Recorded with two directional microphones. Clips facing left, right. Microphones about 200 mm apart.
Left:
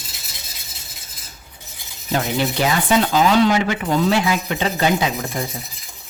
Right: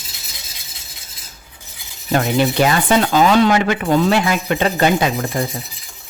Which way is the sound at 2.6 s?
60° right (ahead or behind).